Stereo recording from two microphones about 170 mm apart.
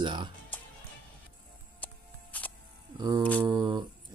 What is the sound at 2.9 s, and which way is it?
Mantra, 20° right (ahead or behind).